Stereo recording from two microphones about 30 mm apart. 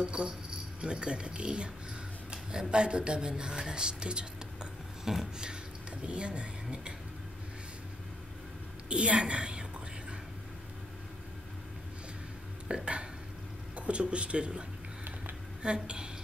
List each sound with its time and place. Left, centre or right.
0.0 s speech: right
2.7 s speech: right
8.8 s a woman's voice: right
12.6 s a sound: right
13.7 s speech: right